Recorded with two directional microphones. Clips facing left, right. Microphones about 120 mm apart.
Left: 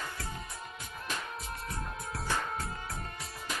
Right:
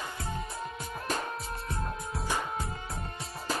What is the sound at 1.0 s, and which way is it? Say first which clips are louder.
Music: right 6 dB; 40° right (ahead or behind).